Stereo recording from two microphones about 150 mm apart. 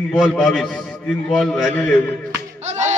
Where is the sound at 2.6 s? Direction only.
50° right (ahead or behind).